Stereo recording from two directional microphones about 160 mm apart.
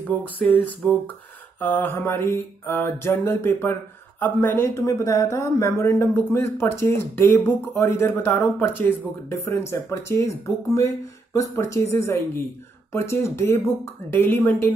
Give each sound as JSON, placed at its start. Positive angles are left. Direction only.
{"t": 0.0, "sound": "speech", "side_deg": 10}